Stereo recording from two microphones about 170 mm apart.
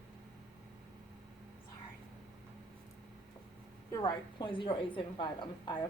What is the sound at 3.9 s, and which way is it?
A woman's voice, 25° left (ahead or behind).